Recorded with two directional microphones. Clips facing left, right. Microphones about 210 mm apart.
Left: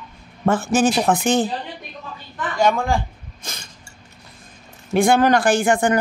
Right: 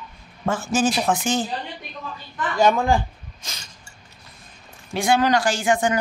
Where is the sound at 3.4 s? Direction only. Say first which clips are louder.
Left 5 dB; 50° left (ahead or behind).